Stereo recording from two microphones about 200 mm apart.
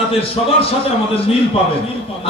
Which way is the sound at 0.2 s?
30° left (ahead or behind).